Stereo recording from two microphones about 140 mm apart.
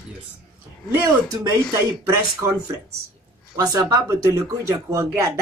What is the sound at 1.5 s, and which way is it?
Speech, 25° right (ahead or behind).